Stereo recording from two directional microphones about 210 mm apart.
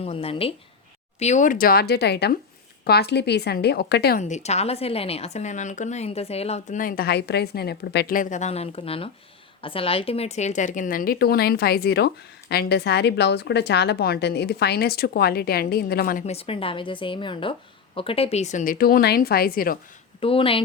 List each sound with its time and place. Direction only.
0.0 s a woman's voice: 25° left (ahead or behind); by 4.2 s 50° left (ahead or behind)
4.2 s a woman's voice: 35° left (ahead or behind)
20.2 s speech: 25° left (ahead or behind)